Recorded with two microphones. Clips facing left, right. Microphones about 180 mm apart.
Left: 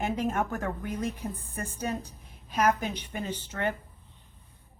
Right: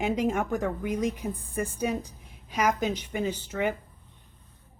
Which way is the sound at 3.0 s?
90° right.